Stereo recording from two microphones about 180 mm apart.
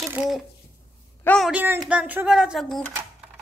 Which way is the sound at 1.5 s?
10° right (ahead or behind).